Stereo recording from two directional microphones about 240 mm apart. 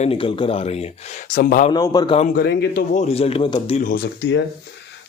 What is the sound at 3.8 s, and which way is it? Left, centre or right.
Speech, left.